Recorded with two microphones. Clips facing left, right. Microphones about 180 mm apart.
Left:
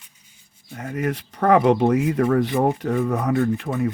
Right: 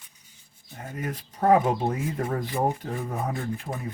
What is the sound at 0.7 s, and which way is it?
Speech, 85° left.